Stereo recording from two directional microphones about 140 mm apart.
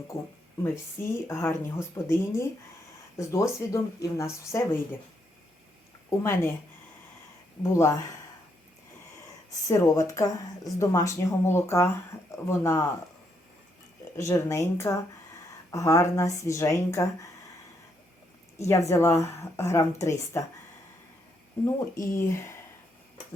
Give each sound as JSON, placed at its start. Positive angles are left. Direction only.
{"t": 0.1, "sound": "speech", "side_deg": 20}
{"t": 6.1, "sound": "speech", "side_deg": 15}
{"t": 7.6, "sound": "speech", "side_deg": 20}
{"t": 9.6, "sound": "speech", "side_deg": 20}
{"t": 12.1, "sound": "a sound", "side_deg": 20}
{"t": 12.5, "sound": "speech", "side_deg": 20}
{"t": 14.2, "sound": "speech", "side_deg": 20}
{"t": 18.7, "sound": "speech", "side_deg": 20}
{"t": 21.6, "sound": "speech", "side_deg": 20}